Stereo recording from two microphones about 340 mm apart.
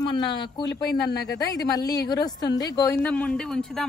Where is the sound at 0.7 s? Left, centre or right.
Left.